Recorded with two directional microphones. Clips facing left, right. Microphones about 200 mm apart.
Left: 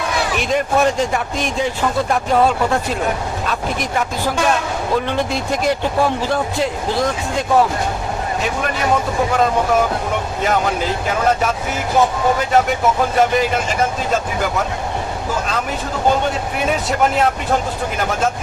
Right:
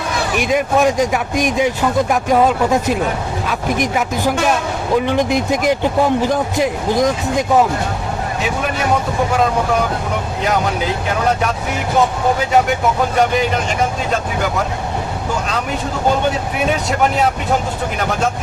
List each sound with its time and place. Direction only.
0.3 s speech: 10° right (ahead or behind)